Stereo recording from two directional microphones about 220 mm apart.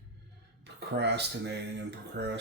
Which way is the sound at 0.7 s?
50° right (ahead or behind).